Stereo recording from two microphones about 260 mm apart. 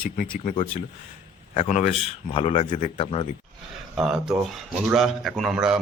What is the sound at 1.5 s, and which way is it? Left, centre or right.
A man's voice, left.